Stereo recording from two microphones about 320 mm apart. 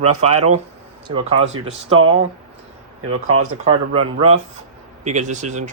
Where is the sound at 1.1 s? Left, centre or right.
Centre.